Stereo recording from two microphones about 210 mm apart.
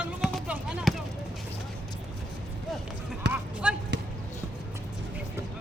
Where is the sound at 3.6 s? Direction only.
5° right (ahead or behind).